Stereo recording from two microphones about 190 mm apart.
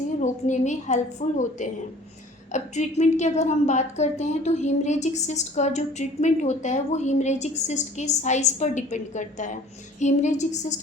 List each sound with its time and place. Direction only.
0.2 s a woman's voice: 40° left (ahead or behind)